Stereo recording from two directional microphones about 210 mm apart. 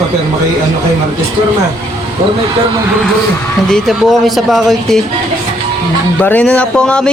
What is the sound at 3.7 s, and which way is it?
Speech, centre (ahead or behind).